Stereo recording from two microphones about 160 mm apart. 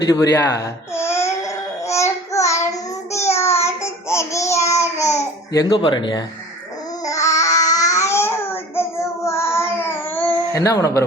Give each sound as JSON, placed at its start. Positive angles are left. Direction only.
{"t": 0.1, "sound": "speech", "side_deg": 20}
{"t": 0.6, "sound": "babbling", "side_deg": 15}
{"t": 3.1, "sound": "child singing", "side_deg": 15}
{"t": 5.7, "sound": "speech", "side_deg": 30}
{"t": 7.0, "sound": "child singing", "side_deg": 20}